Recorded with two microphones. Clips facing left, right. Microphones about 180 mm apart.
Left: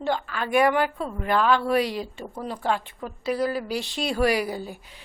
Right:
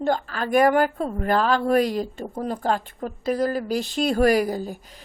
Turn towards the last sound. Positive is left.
turn(degrees=-40)  # may be behind; listen again after turning